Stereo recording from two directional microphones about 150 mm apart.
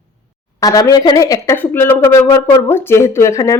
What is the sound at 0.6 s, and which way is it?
Speech, 25° left (ahead or behind).